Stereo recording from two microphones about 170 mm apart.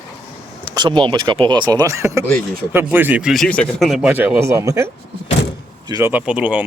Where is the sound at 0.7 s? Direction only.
25° right (ahead or behind); by 3.3 s 10° right (ahead or behind).